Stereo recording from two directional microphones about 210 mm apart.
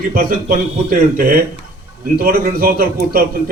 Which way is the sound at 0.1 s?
45° right (ahead or behind).